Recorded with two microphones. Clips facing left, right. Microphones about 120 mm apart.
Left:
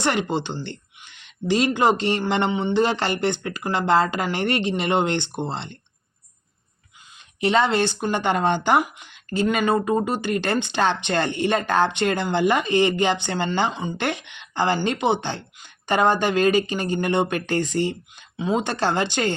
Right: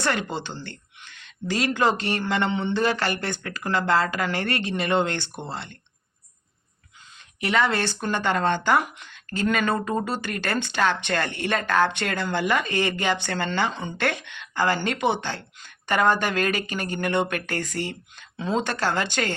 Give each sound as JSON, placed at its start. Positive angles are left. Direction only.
{"t": 0.0, "sound": "speech", "side_deg": 20}
{"t": 7.4, "sound": "speech", "side_deg": 25}